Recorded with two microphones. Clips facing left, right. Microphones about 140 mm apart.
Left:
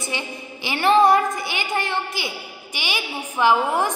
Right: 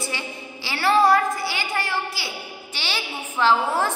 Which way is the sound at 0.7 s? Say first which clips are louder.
Left 2 dB; 20° left (ahead or behind).